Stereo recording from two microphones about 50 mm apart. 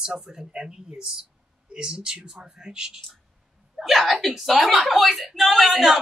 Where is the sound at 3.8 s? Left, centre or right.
Centre.